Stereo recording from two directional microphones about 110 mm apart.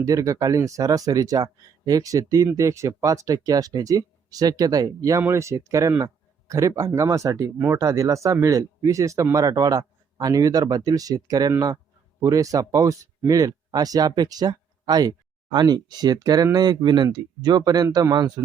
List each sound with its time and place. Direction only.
0.0 s speech: 30° right (ahead or behind)